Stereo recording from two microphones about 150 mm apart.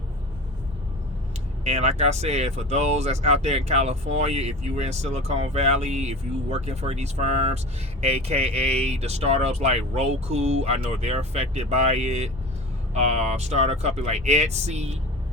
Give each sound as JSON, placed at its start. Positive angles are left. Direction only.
{"t": 1.6, "sound": "speech", "side_deg": -45}